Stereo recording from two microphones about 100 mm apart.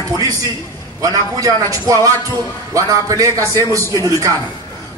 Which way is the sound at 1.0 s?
35° right (ahead or behind).